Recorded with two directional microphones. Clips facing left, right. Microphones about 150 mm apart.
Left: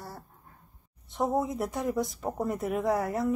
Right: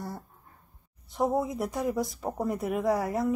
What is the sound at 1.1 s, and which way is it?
Speech, centre (ahead or behind).